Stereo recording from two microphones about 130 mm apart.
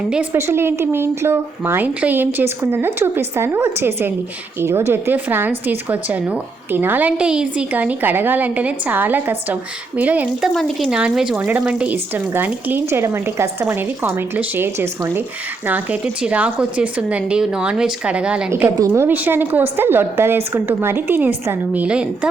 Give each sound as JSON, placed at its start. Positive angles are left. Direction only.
{"t": 0.3, "sound": "speech", "side_deg": -20}
{"t": 10.5, "sound": "speech", "side_deg": 0}
{"t": 18.6, "sound": "speech", "side_deg": -20}